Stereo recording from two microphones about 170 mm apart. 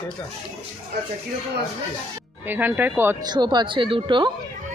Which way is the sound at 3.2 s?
25° right (ahead or behind).